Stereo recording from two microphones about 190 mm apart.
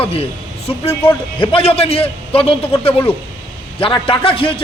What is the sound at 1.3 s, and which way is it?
A man's voice, 30° left (ahead or behind).